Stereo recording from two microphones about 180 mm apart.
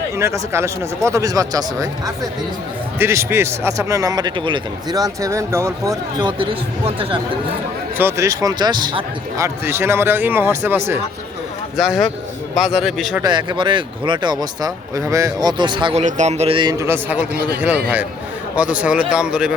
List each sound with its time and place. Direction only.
0.2 s a man's voice: 15° right (ahead or behind); by 7.2 s 30° right (ahead or behind)
7.9 s a man's voice: 15° right (ahead or behind)
9.6 s speech: 15° right (ahead or behind)
11.8 s speech: centre (ahead or behind)
13.2 s a man's voice: 25° right (ahead or behind)
16.0 s a man's voice: 40° right (ahead or behind); by 19.5 s 5° right (ahead or behind)